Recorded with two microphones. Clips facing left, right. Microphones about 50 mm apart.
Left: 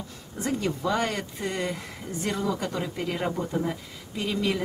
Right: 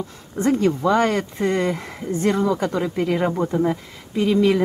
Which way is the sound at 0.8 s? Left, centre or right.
Centre.